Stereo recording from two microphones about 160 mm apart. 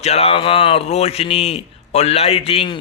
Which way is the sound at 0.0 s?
40° left (ahead or behind).